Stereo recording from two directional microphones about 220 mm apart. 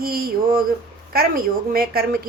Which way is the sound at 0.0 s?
45° right (ahead or behind).